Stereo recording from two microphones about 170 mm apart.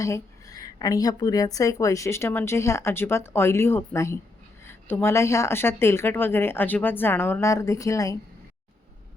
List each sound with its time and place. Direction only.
0.0 s a woman's voice: 20° left (ahead or behind)